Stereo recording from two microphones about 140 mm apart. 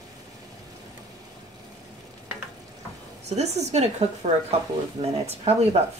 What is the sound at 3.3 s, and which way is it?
A woman's voice, 50° right (ahead or behind).